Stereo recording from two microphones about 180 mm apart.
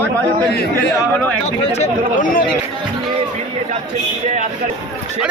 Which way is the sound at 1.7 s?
45° left (ahead or behind).